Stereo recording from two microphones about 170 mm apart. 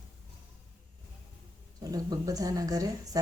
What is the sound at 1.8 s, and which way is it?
Speech, 20° right (ahead or behind).